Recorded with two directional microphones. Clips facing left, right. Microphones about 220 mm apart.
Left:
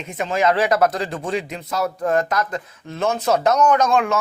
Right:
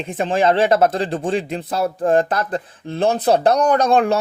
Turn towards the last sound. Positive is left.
turn(degrees=-35)  # may be behind; listen again after turning